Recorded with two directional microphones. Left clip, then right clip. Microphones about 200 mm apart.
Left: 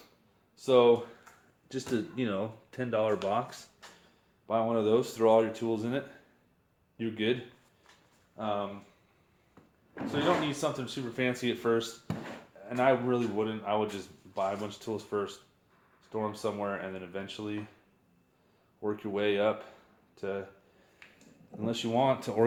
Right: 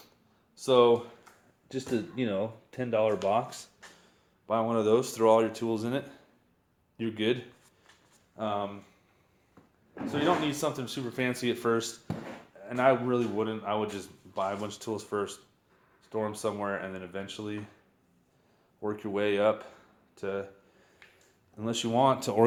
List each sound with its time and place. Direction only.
0.5 s speech: 30° right (ahead or behind)
1.2 s speech: 15° right (ahead or behind)
8.4 s speech: 35° right (ahead or behind)
10.1 s speech: 40° right (ahead or behind)
18.8 s speech: 25° right (ahead or behind)
21.6 s speech: 20° right (ahead or behind)